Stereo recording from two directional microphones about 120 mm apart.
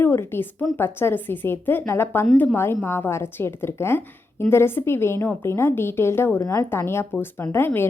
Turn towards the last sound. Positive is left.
turn(degrees=20)  # may be behind; listen again after turning